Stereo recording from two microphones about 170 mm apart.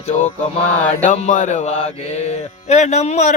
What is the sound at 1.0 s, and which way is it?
Mantra, 50° left (ahead or behind).